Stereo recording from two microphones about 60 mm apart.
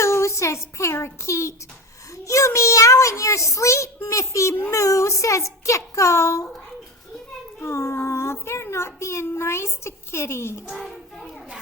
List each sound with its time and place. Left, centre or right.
0.0 s a child's voice: left
7.6 s a child's voice: left